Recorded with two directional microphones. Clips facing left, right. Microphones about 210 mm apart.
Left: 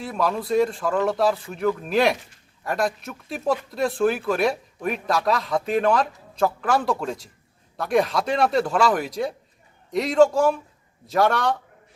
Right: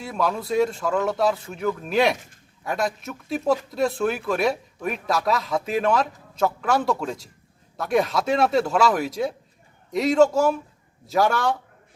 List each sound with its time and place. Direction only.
0.0 s speech: centre (ahead or behind)